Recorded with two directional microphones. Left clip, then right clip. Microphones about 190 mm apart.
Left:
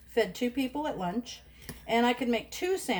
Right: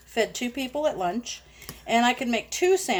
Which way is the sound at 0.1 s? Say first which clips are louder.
Right 2 dB; 45° right (ahead or behind).